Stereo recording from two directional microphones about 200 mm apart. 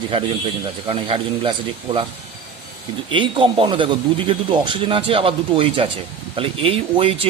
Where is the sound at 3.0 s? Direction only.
25° right (ahead or behind).